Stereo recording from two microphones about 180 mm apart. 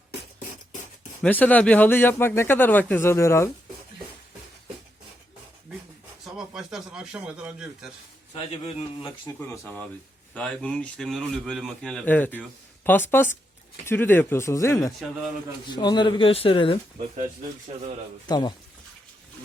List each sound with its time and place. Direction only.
1.2 s speech: 10° left (ahead or behind)
6.2 s speech: 5° right (ahead or behind)
8.4 s speech: 35° left (ahead or behind)
9.2 s a man's voice: 10° left (ahead or behind); by 16.7 s 30° left (ahead or behind)
18.3 s speech: 25° left (ahead or behind)